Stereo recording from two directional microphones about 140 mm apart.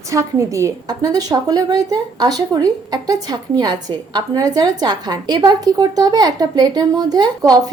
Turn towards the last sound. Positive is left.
turn(degrees=-25)  # may be behind; listen again after turning